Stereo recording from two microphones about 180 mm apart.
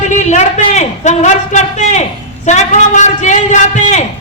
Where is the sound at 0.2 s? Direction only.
40° left (ahead or behind).